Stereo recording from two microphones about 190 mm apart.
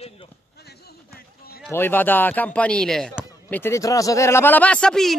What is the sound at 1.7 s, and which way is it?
Speech, 10° left (ahead or behind).